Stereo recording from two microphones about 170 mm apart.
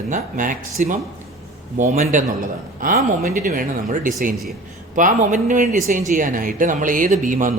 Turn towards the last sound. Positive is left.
turn(degrees=-50)  # may be behind; listen again after turning